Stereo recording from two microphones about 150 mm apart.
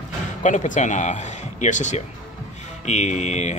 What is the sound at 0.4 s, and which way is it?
Speech, 55° left (ahead or behind).